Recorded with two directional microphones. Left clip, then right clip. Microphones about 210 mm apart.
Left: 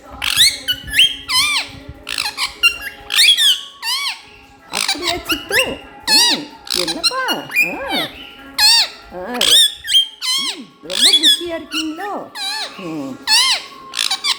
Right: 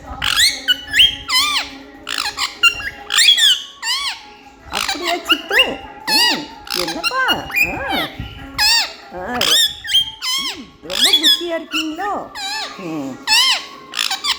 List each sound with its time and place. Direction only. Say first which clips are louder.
0.2 s squeak: left 1 dB; 15° left (ahead or behind)